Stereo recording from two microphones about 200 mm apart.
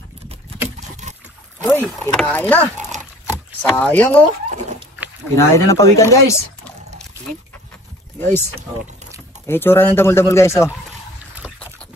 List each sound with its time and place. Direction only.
0.7 s rowboat: 35° right (ahead or behind)
1.6 s speech: 10° left (ahead or behind)
5.3 s speech: 15° left (ahead or behind)
8.2 s speech: 10° left (ahead or behind)